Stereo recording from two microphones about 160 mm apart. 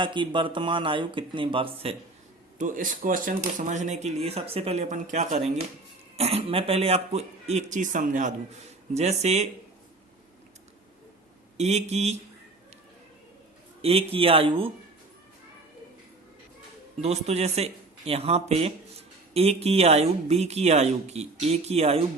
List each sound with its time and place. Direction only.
0.0 s speech: 30° right (ahead or behind)
2.6 s a man's voice: 55° right (ahead or behind)
11.5 s a man's voice: 45° right (ahead or behind)
13.8 s speech: 35° right (ahead or behind)
17.0 s speech: 45° right (ahead or behind)